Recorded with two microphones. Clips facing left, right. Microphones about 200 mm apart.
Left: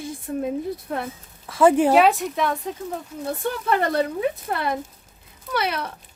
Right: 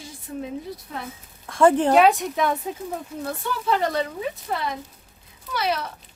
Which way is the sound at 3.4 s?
55° left (ahead or behind).